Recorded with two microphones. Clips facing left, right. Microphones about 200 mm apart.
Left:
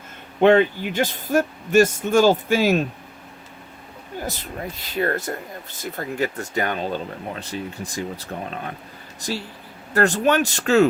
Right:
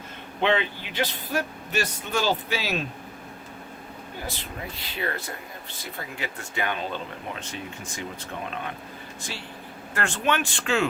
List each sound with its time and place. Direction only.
0.4 s speech: 45° left (ahead or behind)
4.3 s speech: 45° left (ahead or behind)